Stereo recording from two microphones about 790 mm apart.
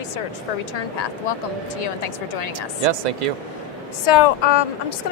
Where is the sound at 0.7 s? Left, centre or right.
Left.